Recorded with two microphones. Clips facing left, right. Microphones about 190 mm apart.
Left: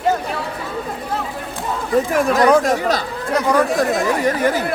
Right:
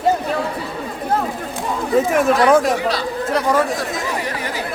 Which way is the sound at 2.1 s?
Centre (ahead or behind).